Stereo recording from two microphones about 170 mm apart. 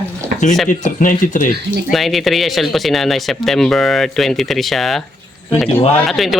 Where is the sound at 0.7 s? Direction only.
50° left (ahead or behind).